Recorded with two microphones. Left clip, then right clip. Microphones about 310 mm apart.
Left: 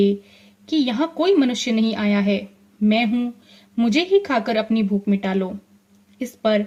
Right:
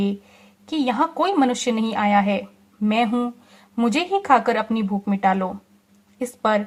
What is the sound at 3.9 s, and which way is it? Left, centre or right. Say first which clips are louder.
A woman's voice: right 1 dB; centre.